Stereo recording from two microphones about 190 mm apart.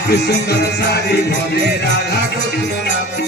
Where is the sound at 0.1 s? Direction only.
60° left (ahead or behind).